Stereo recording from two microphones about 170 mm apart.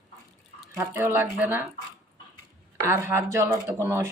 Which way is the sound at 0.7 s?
15° right (ahead or behind).